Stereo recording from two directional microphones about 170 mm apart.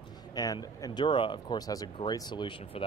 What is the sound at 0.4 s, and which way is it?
Speech, 20° left (ahead or behind).